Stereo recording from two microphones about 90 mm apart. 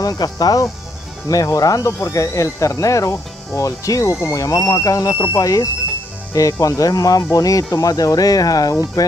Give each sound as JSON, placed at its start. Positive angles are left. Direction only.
{"t": 0.0, "sound": "speech", "side_deg": 45}